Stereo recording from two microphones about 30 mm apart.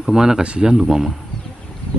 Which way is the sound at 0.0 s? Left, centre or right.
Right.